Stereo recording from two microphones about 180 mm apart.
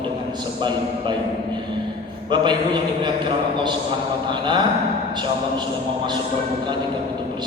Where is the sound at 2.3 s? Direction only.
25° right (ahead or behind).